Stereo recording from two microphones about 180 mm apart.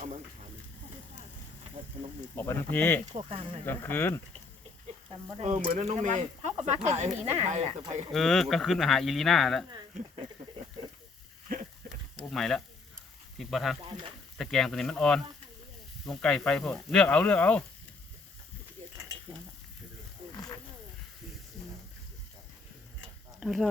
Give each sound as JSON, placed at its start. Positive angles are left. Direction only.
{"t": 2.3, "sound": "speech", "side_deg": 10}
{"t": 3.1, "sound": "speech", "side_deg": -35}
{"t": 3.7, "sound": "speech", "side_deg": 10}
{"t": 5.4, "sound": "speech", "side_deg": -40}
{"t": 8.1, "sound": "speech", "side_deg": 0}
{"t": 11.5, "sound": "a sound", "side_deg": -55}
{"t": 11.9, "sound": "a sound", "side_deg": 0}
{"t": 13.4, "sound": "speech", "side_deg": 0}
{"t": 20.3, "sound": "wild animals", "side_deg": 20}
{"t": 23.4, "sound": "speech", "side_deg": 0}